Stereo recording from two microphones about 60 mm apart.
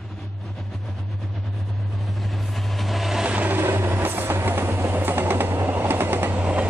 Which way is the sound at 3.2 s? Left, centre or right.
Right.